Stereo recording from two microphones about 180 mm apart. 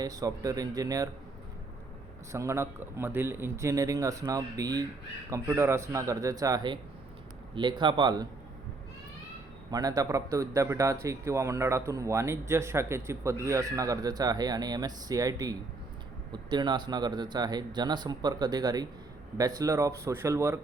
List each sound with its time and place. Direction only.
0.0 s speech: 20° right (ahead or behind)
2.3 s speech: 15° right (ahead or behind)
9.7 s speech: 20° right (ahead or behind)